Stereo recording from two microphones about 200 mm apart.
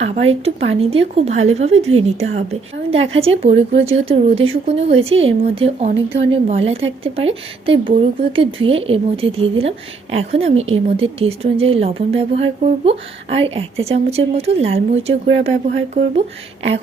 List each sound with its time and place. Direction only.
0.0 s a woman's voice: 30° right (ahead or behind)